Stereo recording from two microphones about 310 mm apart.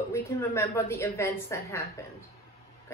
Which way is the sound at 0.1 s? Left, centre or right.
Centre.